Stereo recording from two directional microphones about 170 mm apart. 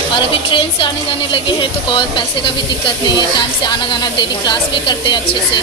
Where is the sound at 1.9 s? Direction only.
30° left (ahead or behind).